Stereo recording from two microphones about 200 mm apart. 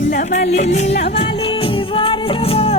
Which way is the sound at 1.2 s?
30° left (ahead or behind).